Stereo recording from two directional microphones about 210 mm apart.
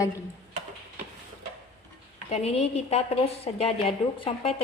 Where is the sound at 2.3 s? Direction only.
30° left (ahead or behind).